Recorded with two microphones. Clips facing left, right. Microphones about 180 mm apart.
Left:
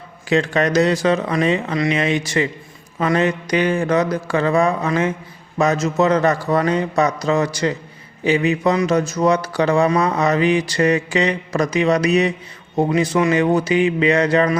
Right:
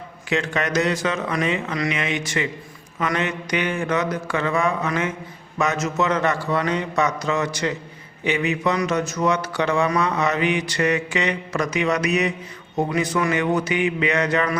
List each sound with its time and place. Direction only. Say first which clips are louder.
0.3 s speech: left 6 dB; 35° left (ahead or behind)